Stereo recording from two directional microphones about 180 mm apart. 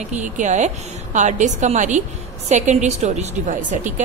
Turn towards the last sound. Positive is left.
turn(degrees=-45)  # may be behind; listen again after turning